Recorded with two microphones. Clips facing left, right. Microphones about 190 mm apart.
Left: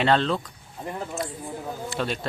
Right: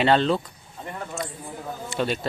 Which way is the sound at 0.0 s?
5° right (ahead or behind).